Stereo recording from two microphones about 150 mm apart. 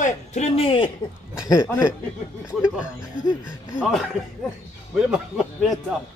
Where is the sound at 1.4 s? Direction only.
25° left (ahead or behind).